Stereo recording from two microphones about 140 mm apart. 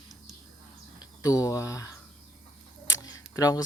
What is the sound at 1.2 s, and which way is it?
Speech, 25° left (ahead or behind).